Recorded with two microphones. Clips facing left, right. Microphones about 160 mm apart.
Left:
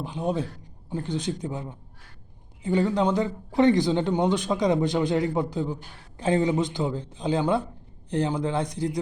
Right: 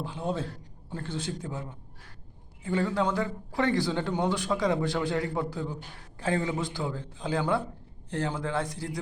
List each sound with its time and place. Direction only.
0.0 s a man's voice: 15° left (ahead or behind)
2.6 s speech: 20° left (ahead or behind)